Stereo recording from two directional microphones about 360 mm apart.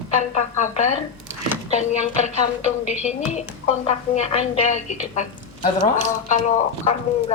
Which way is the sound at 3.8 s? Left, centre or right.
Centre.